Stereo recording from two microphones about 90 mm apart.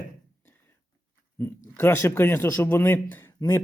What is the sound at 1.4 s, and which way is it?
Speech, 25° left (ahead or behind).